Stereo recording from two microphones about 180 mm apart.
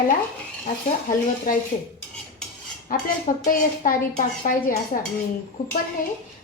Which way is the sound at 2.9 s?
45° left (ahead or behind).